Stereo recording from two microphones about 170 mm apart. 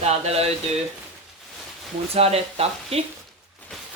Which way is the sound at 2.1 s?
35° right (ahead or behind).